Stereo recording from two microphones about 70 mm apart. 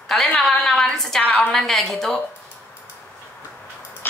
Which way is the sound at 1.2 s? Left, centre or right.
Centre.